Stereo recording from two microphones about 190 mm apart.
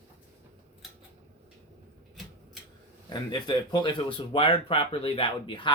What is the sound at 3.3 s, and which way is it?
Speech, 20° left (ahead or behind).